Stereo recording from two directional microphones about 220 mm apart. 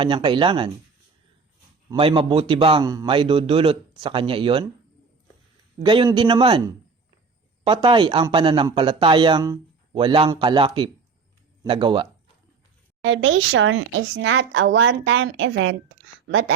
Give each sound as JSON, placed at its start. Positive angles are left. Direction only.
{"t": 0.0, "sound": "speech", "side_deg": -20}
{"t": 1.9, "sound": "speech", "side_deg": -25}
{"t": 5.8, "sound": "speech", "side_deg": -20}
{"t": 13.1, "sound": "speech", "side_deg": -60}